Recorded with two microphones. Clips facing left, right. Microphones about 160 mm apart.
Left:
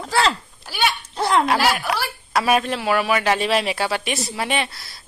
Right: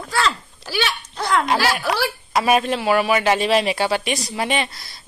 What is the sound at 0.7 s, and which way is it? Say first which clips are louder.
Speech: left 1 dB; 90° right.